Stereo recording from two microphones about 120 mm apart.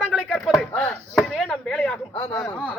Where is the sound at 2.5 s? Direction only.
10° left (ahead or behind).